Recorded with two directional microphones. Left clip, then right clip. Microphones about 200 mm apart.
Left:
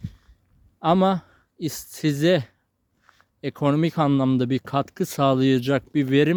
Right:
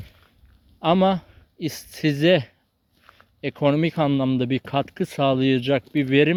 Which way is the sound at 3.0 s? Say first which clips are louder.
Right 5 dB; 55° right (ahead or behind).